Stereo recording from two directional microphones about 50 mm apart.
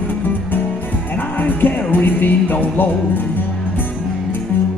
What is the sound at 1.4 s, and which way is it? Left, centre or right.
Music, left.